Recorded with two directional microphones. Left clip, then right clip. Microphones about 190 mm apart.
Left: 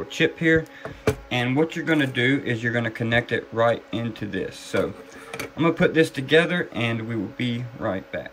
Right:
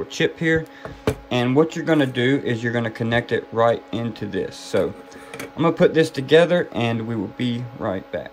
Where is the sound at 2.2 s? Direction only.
70° right (ahead or behind).